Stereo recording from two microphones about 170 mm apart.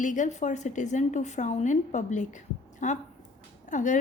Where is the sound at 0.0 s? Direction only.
45° left (ahead or behind).